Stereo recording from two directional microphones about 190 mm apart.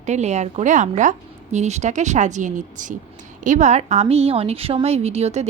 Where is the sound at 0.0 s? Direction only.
35° right (ahead or behind).